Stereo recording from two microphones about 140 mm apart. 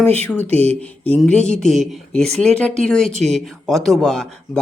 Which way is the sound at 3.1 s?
50° right (ahead or behind).